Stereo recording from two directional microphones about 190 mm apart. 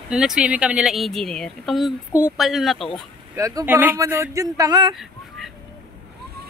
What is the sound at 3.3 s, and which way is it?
Speech, 15° right (ahead or behind).